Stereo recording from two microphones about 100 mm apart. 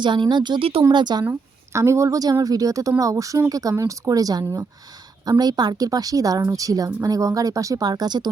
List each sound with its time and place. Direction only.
0.0 s speech: 50° right (ahead or behind)
1.2 s a woman's voice: 25° right (ahead or behind); by 8.3 s 45° right (ahead or behind)